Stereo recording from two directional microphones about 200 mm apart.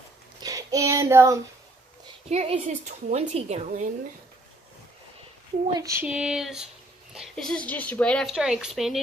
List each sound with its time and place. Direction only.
0.4 s child singing: 20° right (ahead or behind)
2.2 s a woman's voice: 30° right (ahead or behind)
5.7 s speech: 15° right (ahead or behind)